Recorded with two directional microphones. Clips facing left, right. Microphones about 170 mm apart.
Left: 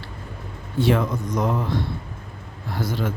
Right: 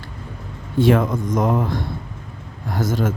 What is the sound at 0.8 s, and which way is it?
Speech, 50° right (ahead or behind).